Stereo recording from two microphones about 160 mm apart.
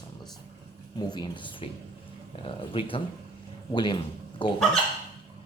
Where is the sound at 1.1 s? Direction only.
30° left (ahead or behind).